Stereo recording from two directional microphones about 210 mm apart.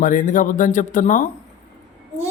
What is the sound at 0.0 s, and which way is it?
Speech, 40° left (ahead or behind).